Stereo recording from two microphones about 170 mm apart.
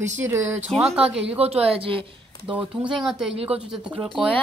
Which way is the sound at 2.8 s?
Centre (ahead or behind).